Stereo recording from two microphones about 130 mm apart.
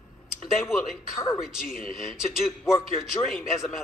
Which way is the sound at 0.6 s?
15° left (ahead or behind).